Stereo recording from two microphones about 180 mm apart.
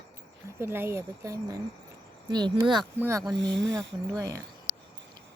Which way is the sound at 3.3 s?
80° right.